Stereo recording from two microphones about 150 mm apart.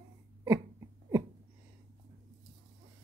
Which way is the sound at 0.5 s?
20° right (ahead or behind).